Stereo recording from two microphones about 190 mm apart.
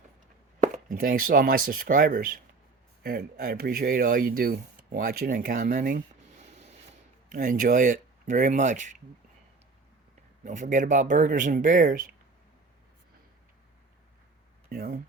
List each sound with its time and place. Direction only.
0.9 s speech: 45° right (ahead or behind)
6.4 s a sound: 35° right (ahead or behind)
7.3 s speech: 45° right (ahead or behind)
10.4 s speech: 40° right (ahead or behind)
14.7 s speech: 50° right (ahead or behind)